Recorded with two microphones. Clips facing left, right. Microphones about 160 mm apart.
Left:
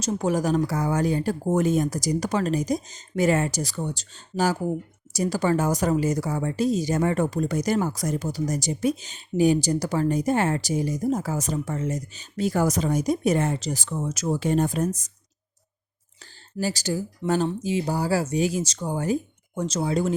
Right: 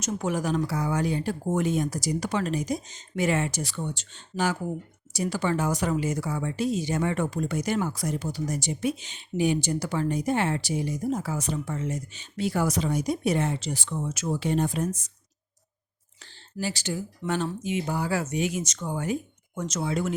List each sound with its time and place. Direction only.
0.0 s speech: 35° left (ahead or behind)
16.6 s speech: 40° left (ahead or behind)